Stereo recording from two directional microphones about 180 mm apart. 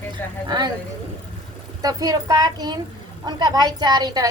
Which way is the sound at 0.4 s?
25° right (ahead or behind).